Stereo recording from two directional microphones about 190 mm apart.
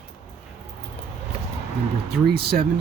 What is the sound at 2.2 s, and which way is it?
Speech, 55° right (ahead or behind).